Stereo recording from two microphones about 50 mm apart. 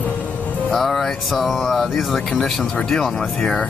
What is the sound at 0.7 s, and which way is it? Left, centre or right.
Speech, centre.